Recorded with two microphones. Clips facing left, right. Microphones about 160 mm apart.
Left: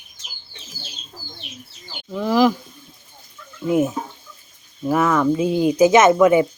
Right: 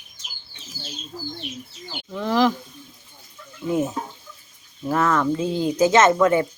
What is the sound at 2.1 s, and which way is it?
Speech, 10° left (ahead or behind).